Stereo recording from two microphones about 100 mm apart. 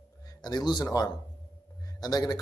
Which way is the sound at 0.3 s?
40° left (ahead or behind).